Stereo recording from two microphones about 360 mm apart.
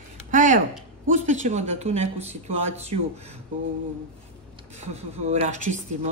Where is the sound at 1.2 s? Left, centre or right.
Centre.